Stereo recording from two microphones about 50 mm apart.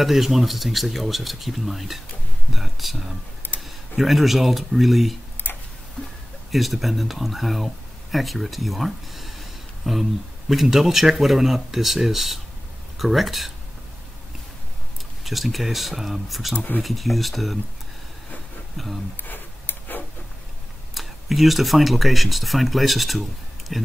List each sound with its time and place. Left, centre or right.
0.0 s speech: centre
6.5 s speech: centre
15.2 s speech: centre
18.8 s speech: centre
19.2 s tick-tock: left
20.9 s speech: centre